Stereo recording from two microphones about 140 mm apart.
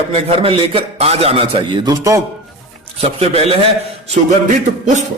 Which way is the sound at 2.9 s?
45° right (ahead or behind).